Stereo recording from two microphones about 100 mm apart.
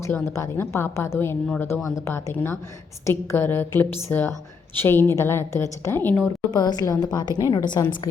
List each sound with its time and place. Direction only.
0.1 s a woman's voice: 25° left (ahead or behind)
6.5 s a woman's voice: 40° left (ahead or behind)